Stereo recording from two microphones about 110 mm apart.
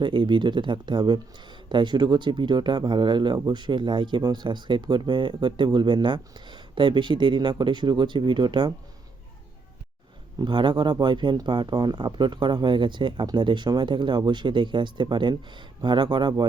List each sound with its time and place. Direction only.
0.0 s speech: 45° right (ahead or behind)
10.3 s speech: 45° right (ahead or behind)